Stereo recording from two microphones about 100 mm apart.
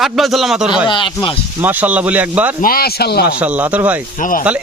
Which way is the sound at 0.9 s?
55° left (ahead or behind).